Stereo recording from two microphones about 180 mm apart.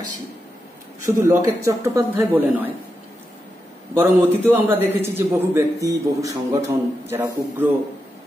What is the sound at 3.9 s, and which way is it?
A man's voice, 15° right (ahead or behind).